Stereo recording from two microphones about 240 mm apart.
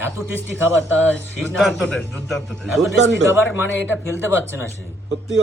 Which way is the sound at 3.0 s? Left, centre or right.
Right.